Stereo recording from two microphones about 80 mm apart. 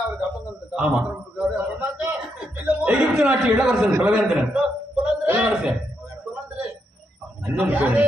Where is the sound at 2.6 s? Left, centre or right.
Centre.